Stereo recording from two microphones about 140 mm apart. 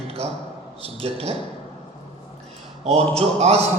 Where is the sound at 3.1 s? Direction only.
45° right (ahead or behind).